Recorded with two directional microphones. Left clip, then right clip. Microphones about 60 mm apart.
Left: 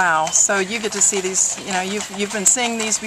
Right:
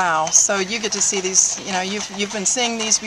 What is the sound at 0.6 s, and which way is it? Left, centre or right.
Speech, right.